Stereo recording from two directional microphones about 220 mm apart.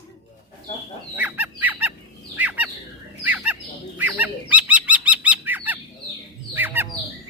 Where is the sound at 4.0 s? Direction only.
5° right (ahead or behind).